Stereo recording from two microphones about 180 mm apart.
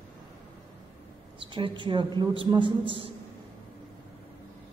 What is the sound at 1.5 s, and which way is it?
A man's voice, 25° right (ahead or behind).